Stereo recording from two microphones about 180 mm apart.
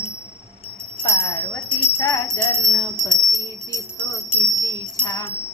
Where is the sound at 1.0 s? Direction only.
15° left (ahead or behind).